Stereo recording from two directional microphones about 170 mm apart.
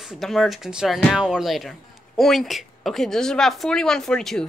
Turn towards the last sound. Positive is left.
turn(degrees=0)  # may be behind; listen again after turning